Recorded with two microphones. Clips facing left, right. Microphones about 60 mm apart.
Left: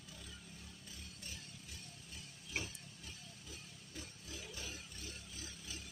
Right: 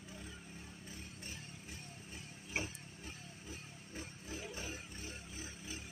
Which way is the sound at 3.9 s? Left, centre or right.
Right.